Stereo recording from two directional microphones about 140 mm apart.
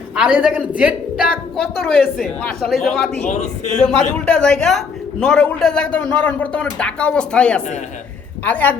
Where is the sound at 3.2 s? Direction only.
55° left (ahead or behind).